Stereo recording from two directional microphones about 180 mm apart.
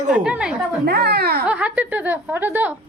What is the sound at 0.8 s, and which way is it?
Speech, 65° right (ahead or behind).